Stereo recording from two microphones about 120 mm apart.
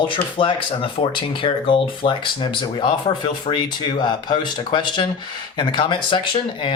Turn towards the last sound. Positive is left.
turn(degrees=45)  # may be behind; listen again after turning